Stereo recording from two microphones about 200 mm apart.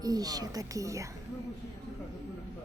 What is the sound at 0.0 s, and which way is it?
Speech, 20° right (ahead or behind).